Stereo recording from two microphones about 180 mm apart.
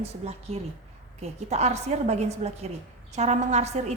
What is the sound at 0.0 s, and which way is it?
A woman's voice, 35° right (ahead or behind).